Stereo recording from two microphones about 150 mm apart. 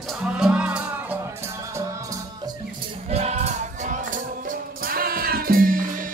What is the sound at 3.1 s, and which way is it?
Music, 45° right (ahead or behind).